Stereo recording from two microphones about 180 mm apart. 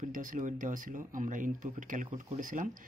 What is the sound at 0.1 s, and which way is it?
Speech, 50° right (ahead or behind).